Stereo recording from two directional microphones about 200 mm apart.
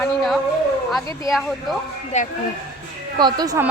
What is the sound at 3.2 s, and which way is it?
Speech, 20° right (ahead or behind).